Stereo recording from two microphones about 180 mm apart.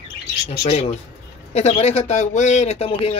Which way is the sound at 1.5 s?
35° left (ahead or behind).